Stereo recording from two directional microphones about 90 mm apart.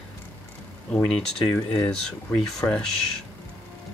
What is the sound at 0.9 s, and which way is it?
Speech, 10° left (ahead or behind).